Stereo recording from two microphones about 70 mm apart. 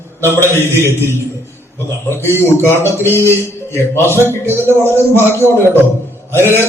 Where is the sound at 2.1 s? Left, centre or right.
Left.